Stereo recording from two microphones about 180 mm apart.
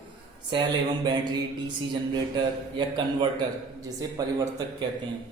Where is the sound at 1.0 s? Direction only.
25° right (ahead or behind).